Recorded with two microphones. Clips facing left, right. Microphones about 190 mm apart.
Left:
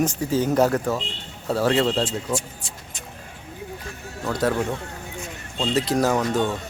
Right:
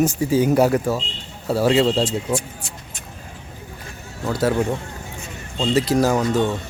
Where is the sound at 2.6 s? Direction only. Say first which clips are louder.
Right 3 dB; 65° right (ahead or behind).